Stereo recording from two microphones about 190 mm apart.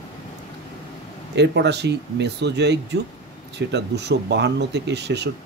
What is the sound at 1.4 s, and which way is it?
Speech, 65° right (ahead or behind).